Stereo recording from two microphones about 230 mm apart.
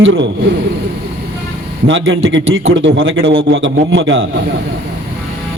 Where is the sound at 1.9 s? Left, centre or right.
Right.